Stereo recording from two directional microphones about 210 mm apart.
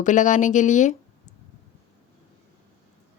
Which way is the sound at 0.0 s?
35° left (ahead or behind).